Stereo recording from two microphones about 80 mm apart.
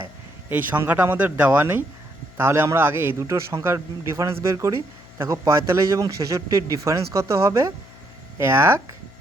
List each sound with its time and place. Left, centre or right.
0.9 s speech: right